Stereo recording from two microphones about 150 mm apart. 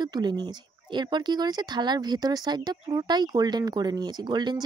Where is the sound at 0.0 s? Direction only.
30° right (ahead or behind).